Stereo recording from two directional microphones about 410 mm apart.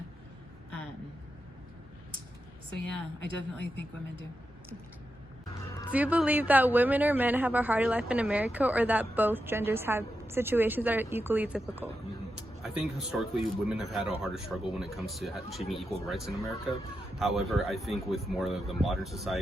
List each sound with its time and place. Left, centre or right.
3.2 s speech: left
5.9 s a woman's voice: centre